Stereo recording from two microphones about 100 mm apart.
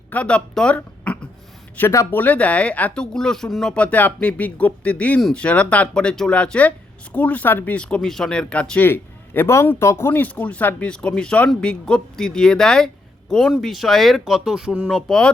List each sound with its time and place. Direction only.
0.1 s speech: 10° left (ahead or behind)
1.9 s speech: 30° left (ahead or behind)
2.1 s speech: 15° left (ahead or behind)
8.9 s speech: 20° left (ahead or behind); by 15.1 s 5° right (ahead or behind)